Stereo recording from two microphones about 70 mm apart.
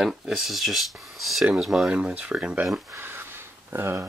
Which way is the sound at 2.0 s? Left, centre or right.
Centre.